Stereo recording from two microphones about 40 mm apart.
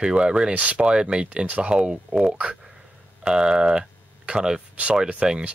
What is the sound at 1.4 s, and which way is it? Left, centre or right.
Speech, right.